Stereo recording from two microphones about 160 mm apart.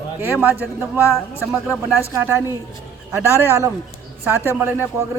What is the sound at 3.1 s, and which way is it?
Speech, 15° right (ahead or behind).